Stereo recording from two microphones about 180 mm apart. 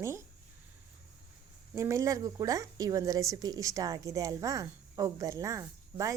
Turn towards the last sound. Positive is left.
turn(degrees=-15)  # may be behind; listen again after turning